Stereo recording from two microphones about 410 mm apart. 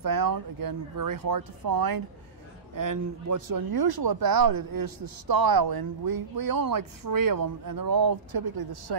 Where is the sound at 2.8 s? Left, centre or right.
Right.